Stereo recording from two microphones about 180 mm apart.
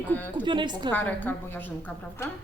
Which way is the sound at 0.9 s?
10° left (ahead or behind).